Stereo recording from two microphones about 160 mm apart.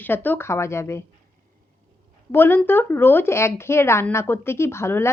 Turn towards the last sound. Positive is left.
turn(degrees=15)  # may be behind; listen again after turning